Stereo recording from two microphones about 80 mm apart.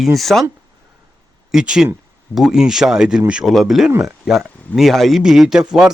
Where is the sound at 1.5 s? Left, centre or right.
Centre.